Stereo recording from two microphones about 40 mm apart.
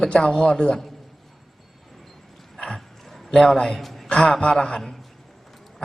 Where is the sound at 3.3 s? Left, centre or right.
Centre.